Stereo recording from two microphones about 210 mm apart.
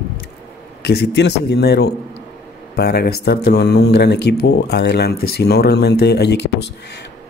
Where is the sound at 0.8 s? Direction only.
50° left (ahead or behind).